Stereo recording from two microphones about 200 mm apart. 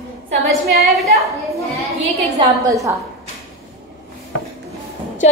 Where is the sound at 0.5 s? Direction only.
Centre (ahead or behind).